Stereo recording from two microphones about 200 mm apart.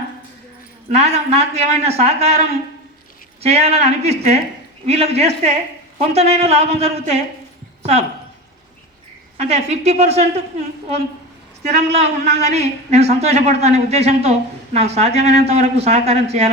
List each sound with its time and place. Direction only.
0.9 s a man's voice: 30° right (ahead or behind)
7.8 s a sound: 30° right (ahead or behind)
9.4 s a man's voice: 30° right (ahead or behind)
11.6 s a man's voice: 30° right (ahead or behind)